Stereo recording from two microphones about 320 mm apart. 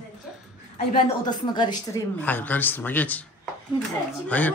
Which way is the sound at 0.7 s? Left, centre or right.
Left.